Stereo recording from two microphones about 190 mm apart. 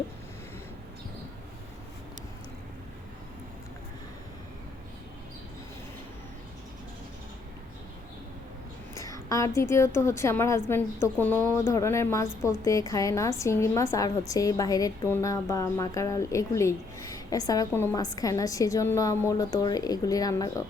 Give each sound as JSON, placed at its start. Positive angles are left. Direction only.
{"t": 9.3, "sound": "a woman's voice", "side_deg": 15}